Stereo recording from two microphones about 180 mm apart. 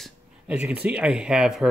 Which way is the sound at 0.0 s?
5° right (ahead or behind).